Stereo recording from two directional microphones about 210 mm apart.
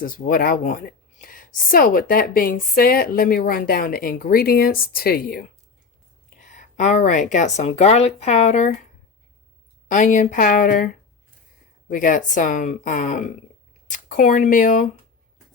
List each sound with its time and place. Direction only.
0.0 s a woman's voice: 40° left (ahead or behind)
6.5 s speech: 35° left (ahead or behind)
9.9 s speech: 35° left (ahead or behind)